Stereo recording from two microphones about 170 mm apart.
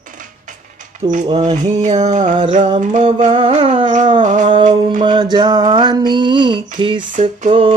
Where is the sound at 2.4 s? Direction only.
40° right (ahead or behind).